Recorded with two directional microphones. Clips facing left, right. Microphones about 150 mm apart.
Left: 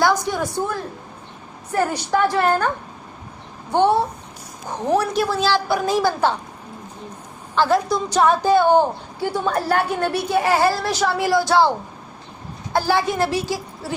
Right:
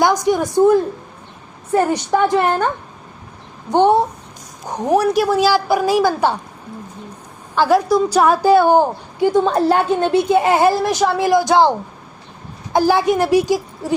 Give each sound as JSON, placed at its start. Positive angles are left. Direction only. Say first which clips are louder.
{"t": 0.0, "sound": "a woman's voice", "louder": "right 4 dB", "side_deg": -15}
{"t": 3.7, "sound": "a woman's voice", "louder": "right 4 dB", "side_deg": -15}
{"t": 7.5, "sound": "a woman's voice", "louder": "right 4 dB", "side_deg": -10}
{"t": 12.7, "sound": "a woman's voice", "louder": "right 5 dB", "side_deg": -15}